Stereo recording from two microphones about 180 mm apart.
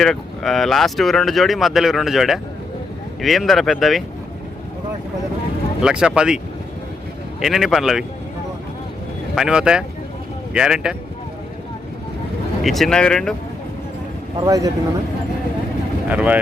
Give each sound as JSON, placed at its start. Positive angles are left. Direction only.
{"t": 0.0, "sound": "speech", "side_deg": 0}
{"t": 5.8, "sound": "speech", "side_deg": -5}
{"t": 9.3, "sound": "speech", "side_deg": -5}
{"t": 12.6, "sound": "speech", "side_deg": 0}
{"t": 14.3, "sound": "speech", "side_deg": -20}
{"t": 16.0, "sound": "speech", "side_deg": -10}